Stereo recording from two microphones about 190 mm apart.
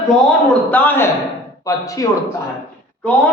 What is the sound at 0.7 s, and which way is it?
A man's voice, 10° left (ahead or behind).